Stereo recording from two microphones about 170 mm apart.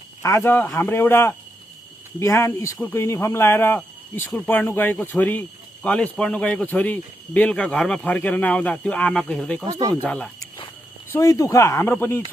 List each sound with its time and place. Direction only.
0.2 s speech: 15° left (ahead or behind)
9.6 s speech: 20° right (ahead or behind)
10.0 s speech: 10° left (ahead or behind)
11.1 s speech: 20° left (ahead or behind)